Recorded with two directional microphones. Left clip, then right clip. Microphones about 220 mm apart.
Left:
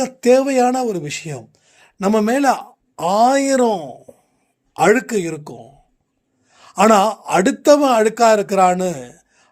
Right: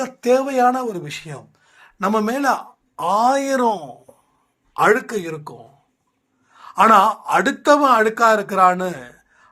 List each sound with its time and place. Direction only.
0.0 s speech: 50° left (ahead or behind)
6.5 s a sound: 55° left (ahead or behind)
7.3 s speech: 55° left (ahead or behind)